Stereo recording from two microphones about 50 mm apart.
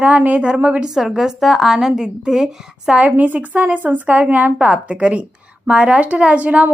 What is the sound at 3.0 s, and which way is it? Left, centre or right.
A woman's voice, right.